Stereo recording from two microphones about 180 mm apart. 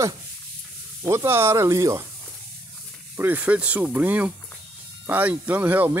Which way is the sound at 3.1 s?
10° right (ahead or behind).